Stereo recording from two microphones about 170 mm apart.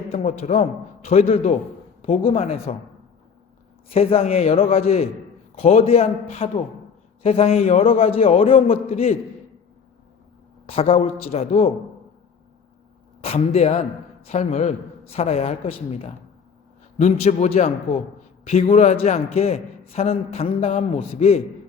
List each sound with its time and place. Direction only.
0.1 s a man's voice: 40° left (ahead or behind)
3.9 s a man's voice: 35° left (ahead or behind)
10.7 s a man's voice: 35° left (ahead or behind)
13.2 s a man's voice: 35° left (ahead or behind)